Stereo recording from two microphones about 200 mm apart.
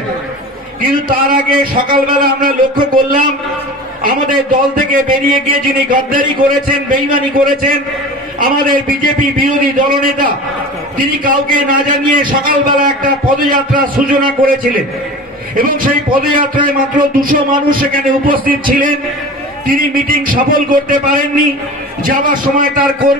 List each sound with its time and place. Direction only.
1.0 s a man's voice: 45° right (ahead or behind)